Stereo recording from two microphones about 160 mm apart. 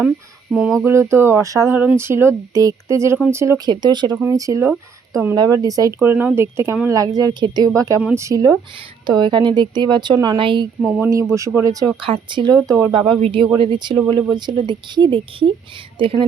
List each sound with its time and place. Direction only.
0.5 s speech: centre (ahead or behind)
0.9 s speech: 15° right (ahead or behind)
3.7 s speech: 25° right (ahead or behind)
10.8 s speech: 5° right (ahead or behind)
11.1 s speech: 20° right (ahead or behind)
12.6 s speech: 20° right (ahead or behind)
12.9 s speech: 30° right (ahead or behind)